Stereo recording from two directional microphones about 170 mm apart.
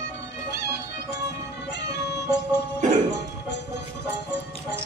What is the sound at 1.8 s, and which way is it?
Music, 85° left.